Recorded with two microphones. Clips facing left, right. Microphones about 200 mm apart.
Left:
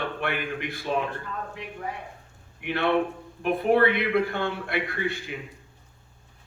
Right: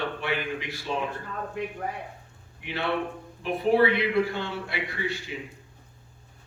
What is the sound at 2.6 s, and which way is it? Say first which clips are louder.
A man's voice: left 5 dB; 60° left (ahead or behind).